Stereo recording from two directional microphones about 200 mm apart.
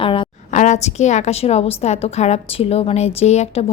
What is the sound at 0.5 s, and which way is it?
A woman's voice, 35° left (ahead or behind).